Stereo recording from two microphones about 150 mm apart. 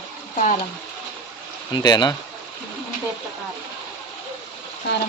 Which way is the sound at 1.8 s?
30° left (ahead or behind).